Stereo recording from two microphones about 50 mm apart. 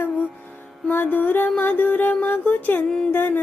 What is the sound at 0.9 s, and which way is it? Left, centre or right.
Music, left.